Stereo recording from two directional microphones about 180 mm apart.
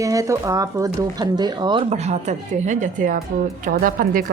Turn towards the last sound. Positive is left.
turn(degrees=-50)  # may be behind; listen again after turning